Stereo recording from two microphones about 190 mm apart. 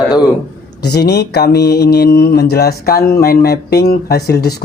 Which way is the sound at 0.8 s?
60° left (ahead or behind).